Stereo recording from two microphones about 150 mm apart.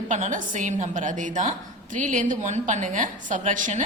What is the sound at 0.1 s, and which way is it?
A woman's voice, 60° right (ahead or behind).